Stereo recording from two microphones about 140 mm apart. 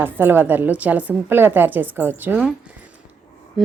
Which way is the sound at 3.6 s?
Centre (ahead or behind).